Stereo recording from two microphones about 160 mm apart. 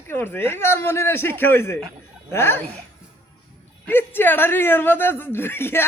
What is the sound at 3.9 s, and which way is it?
Speech, 15° left (ahead or behind).